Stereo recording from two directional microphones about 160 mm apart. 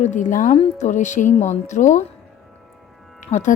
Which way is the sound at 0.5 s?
40° left (ahead or behind).